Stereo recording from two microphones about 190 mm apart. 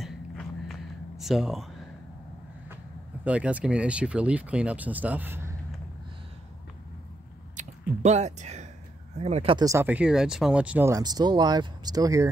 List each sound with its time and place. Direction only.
0.0 s a sound: centre (ahead or behind)
3.3 s speech: 5° right (ahead or behind)
8.0 s speech: 35° right (ahead or behind)
9.7 s speech: 10° right (ahead or behind)